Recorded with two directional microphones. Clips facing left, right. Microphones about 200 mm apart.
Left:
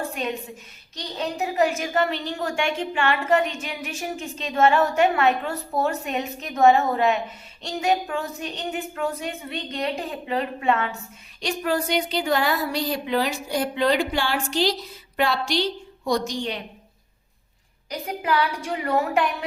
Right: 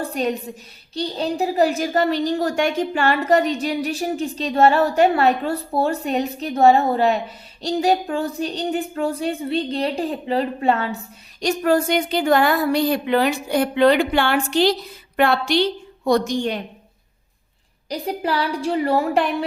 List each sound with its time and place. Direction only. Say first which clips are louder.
0.0 s a woman's voice: right 5 dB; 35° right (ahead or behind)
11.3 s speech: right 7 dB; 45° right (ahead or behind)
17.8 s a woman's voice: right 3 dB; 35° right (ahead or behind)